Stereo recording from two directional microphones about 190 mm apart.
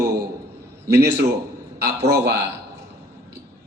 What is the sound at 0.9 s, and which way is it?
A man's voice, 60° right (ahead or behind).